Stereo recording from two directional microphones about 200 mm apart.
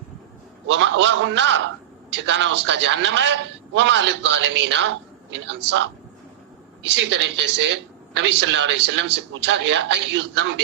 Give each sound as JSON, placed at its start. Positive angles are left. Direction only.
{"t": 0.7, "sound": "a man's voice", "side_deg": -65}
{"t": 6.9, "sound": "a man's voice", "side_deg": -65}